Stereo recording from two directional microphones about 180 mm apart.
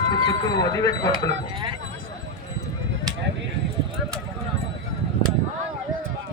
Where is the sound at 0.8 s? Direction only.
20° left (ahead or behind).